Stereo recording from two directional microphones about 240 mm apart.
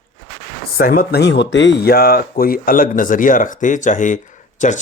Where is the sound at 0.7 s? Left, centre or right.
Left.